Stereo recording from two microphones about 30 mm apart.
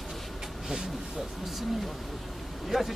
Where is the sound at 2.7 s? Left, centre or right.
Centre.